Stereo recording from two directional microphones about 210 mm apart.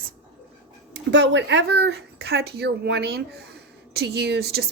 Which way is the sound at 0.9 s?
60° right (ahead or behind).